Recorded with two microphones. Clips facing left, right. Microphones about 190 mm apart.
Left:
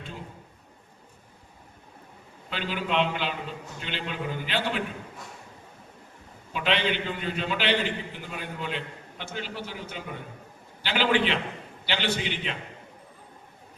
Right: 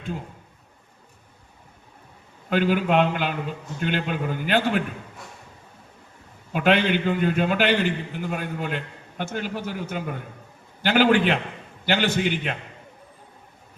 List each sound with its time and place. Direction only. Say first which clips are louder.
2.5 s a man's voice: right 9 dB; 50° right (ahead or behind)
6.5 s a man's voice: right 7 dB; 50° right (ahead or behind)